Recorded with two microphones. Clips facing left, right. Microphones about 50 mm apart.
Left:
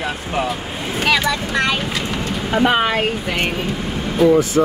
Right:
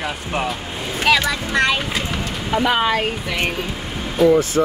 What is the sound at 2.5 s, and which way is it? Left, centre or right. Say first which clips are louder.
Speech: left 1 dB; left.